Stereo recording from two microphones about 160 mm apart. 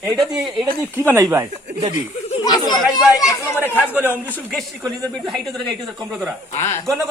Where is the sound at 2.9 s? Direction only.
20° left (ahead or behind).